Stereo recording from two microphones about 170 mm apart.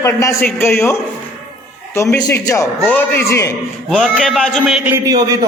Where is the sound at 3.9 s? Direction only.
5° left (ahead or behind).